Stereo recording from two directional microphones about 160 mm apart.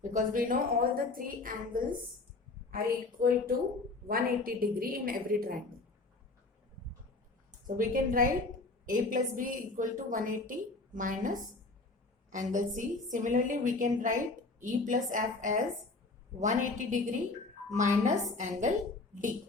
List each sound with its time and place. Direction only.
0.1 s a woman's voice: 55° right (ahead or behind)
7.8 s a woman's voice: 60° right (ahead or behind)